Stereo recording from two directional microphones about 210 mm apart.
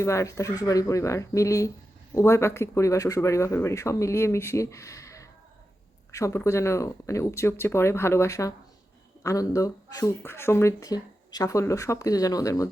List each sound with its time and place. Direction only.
0.0 s speech: 15° left (ahead or behind)